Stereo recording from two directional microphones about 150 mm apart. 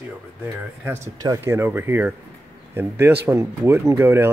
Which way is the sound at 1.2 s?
20° right (ahead or behind).